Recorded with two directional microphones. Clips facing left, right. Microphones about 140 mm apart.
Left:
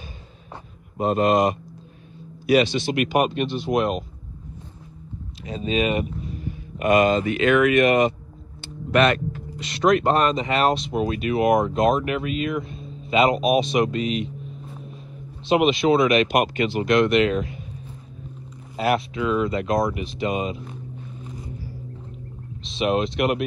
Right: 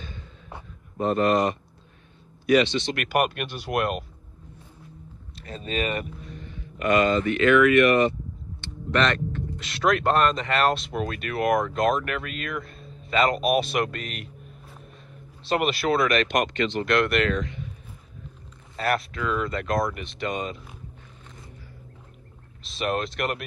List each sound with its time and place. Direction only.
0.9 s speech: 15° left (ahead or behind)
3.1 s speech: 5° right (ahead or behind)
5.5 s speech: 5° left (ahead or behind)
6.8 s speech: 15° left (ahead or behind)
8.5 s a sound: 10° left (ahead or behind)
9.6 s speech: centre (ahead or behind)
18.8 s speech: centre (ahead or behind)
22.6 s speech: centre (ahead or behind)